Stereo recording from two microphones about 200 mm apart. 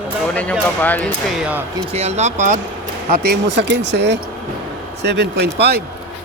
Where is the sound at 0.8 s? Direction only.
10° left (ahead or behind).